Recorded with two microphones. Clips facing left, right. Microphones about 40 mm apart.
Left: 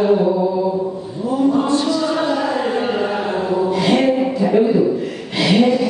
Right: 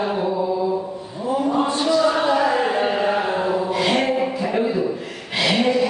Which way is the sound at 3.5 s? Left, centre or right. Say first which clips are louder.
Left 4 dB; centre.